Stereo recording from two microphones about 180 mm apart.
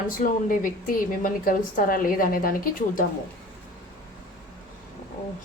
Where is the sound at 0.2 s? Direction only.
50° left (ahead or behind).